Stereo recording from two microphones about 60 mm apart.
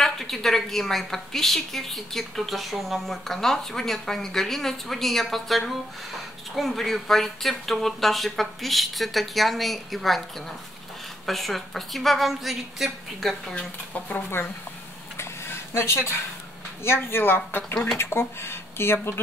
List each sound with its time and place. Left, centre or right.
0.0 s a woman's voice: centre
11.2 s a woman's voice: centre
13.5 s speech: left
15.1 s a sound: left
16.8 s speech: left